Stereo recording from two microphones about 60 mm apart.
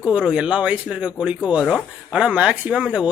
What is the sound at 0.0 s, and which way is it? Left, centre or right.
Speech, centre.